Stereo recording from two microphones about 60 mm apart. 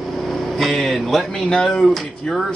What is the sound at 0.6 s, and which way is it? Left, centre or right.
Speech, centre.